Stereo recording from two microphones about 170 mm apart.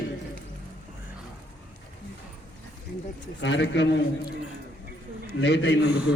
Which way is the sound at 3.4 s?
90° left.